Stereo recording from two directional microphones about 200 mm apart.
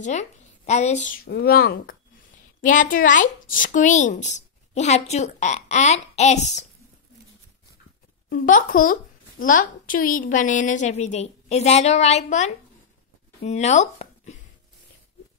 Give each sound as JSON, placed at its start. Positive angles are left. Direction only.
{"t": 0.0, "sound": "speech", "side_deg": 35}
{"t": 8.3, "sound": "speech", "side_deg": 40}